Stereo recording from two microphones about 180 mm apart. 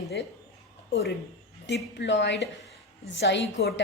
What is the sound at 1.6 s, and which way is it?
A woman's voice, 80° left.